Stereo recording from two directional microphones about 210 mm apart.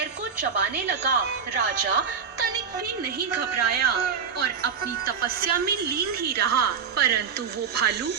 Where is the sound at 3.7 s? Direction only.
50° right (ahead or behind).